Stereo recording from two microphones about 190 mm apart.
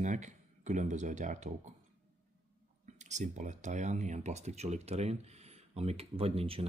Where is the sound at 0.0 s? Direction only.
40° right (ahead or behind).